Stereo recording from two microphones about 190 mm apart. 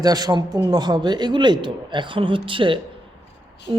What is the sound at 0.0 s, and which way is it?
A man's voice, 20° right (ahead or behind).